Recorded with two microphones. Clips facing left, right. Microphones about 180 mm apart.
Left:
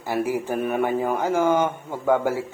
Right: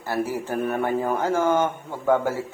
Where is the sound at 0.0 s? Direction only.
15° left (ahead or behind).